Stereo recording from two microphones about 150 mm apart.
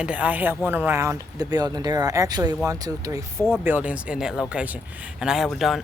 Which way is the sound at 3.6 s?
10° right (ahead or behind).